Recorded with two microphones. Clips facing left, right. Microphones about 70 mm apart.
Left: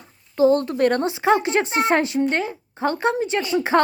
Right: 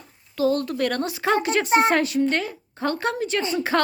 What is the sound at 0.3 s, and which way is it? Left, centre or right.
A woman's voice, left.